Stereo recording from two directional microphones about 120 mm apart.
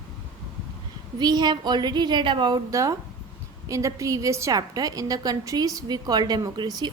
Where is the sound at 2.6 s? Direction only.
25° right (ahead or behind).